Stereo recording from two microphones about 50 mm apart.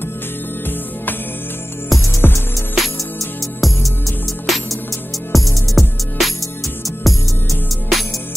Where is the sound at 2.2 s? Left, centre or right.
Left.